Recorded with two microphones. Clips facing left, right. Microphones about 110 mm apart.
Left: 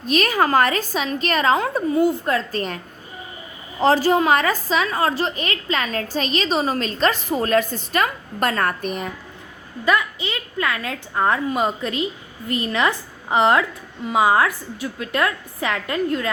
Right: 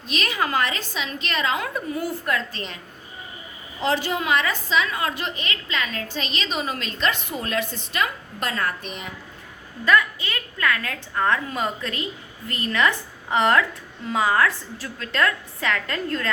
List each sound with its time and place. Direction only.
0.0 s a woman's voice: 45° left (ahead or behind); by 2.3 s 20° left (ahead or behind)
2.3 s a woman's voice: 45° left (ahead or behind)
9.8 s a woman's voice: 20° left (ahead or behind)